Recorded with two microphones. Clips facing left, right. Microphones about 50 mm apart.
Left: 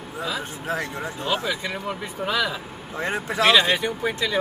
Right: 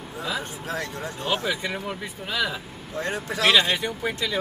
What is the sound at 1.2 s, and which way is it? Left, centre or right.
Speech, centre.